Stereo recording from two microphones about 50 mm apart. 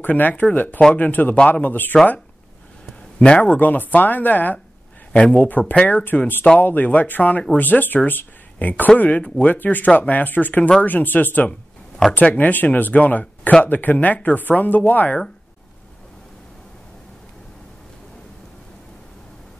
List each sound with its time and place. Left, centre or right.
0.0 s speech: left
3.2 s speech: centre
3.5 s speech: left
5.1 s speech: left
5.5 s speech: left
13.7 s speech: left